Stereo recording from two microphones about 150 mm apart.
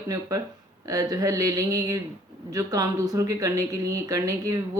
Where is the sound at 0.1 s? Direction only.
25° right (ahead or behind).